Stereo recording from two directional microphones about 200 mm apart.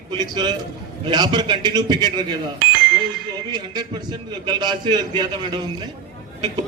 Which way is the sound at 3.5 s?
20° right (ahead or behind).